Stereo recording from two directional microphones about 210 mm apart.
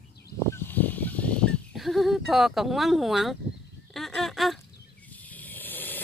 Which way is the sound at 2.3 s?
Centre (ahead or behind).